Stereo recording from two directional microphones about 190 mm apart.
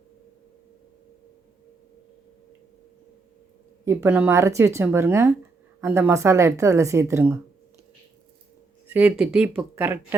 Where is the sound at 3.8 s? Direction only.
15° right (ahead or behind).